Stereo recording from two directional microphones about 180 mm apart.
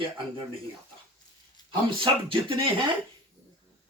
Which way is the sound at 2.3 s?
25° right (ahead or behind).